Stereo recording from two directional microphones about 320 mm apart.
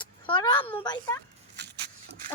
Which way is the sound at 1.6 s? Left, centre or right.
Right.